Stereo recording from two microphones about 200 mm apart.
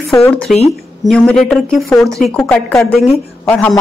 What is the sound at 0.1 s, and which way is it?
A woman's voice, 15° left (ahead or behind).